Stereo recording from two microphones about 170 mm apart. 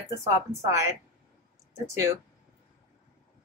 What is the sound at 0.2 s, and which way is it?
Speech, 15° right (ahead or behind).